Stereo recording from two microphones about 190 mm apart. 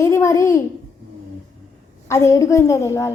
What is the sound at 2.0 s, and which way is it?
A woman's voice, 15° left (ahead or behind).